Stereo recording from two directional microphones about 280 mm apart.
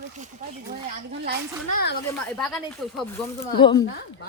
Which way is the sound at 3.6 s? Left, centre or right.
Centre.